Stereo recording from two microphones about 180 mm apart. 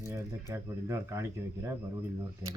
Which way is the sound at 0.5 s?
15° right (ahead or behind).